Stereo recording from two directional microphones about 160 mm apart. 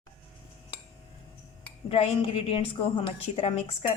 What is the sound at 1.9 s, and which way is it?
A woman's voice, 35° left (ahead or behind).